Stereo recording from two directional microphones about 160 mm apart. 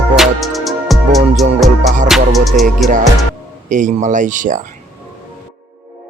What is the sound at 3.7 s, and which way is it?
Speech, 50° right (ahead or behind).